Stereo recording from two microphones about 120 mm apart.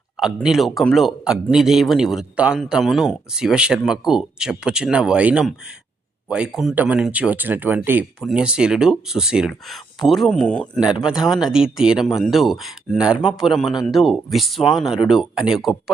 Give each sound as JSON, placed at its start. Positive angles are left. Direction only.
{"t": 0.4, "sound": "speech", "side_deg": 0}
{"t": 11.0, "sound": "speech", "side_deg": -5}